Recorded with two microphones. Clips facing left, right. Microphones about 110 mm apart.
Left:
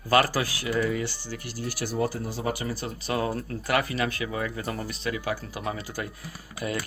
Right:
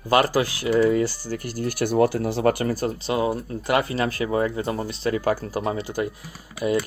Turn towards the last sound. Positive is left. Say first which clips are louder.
# right 8 dB
turn(degrees=-25)  # may be behind; listen again after turning